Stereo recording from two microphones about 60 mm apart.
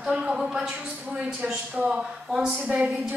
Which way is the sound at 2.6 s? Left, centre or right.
Right.